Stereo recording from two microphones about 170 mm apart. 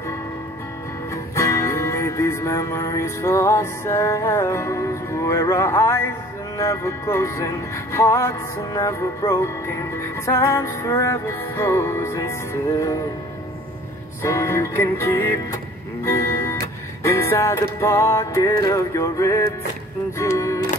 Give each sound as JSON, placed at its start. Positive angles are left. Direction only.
{"t": 1.1, "sound": "music", "side_deg": 15}
{"t": 14.2, "sound": "music", "side_deg": 15}